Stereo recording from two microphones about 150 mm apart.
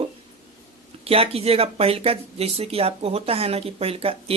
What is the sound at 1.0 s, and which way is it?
Speech, 40° right (ahead or behind).